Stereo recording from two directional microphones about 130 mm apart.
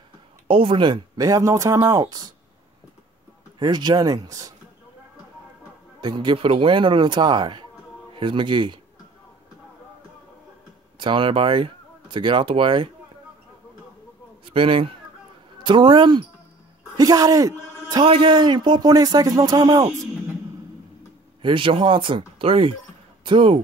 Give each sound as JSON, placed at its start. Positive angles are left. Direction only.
{"t": 0.5, "sound": "speech", "side_deg": -40}
{"t": 3.5, "sound": "speech", "side_deg": -35}
{"t": 5.9, "sound": "a man's voice", "side_deg": -35}
{"t": 11.0, "sound": "speech", "side_deg": -40}
{"t": 14.4, "sound": "speech", "side_deg": -45}
{"t": 21.4, "sound": "speech", "side_deg": -40}